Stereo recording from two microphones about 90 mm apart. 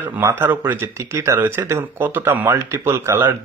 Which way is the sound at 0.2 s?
30° right (ahead or behind).